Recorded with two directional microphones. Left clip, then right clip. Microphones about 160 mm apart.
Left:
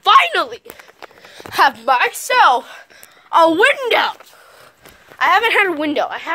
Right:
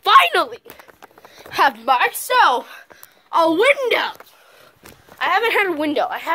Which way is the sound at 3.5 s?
40° left (ahead or behind).